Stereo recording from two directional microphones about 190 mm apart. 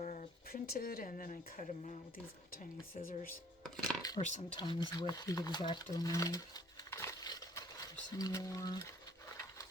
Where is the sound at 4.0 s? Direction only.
20° left (ahead or behind).